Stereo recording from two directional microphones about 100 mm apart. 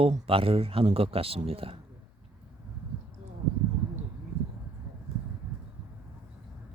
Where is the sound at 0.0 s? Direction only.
70° right (ahead or behind).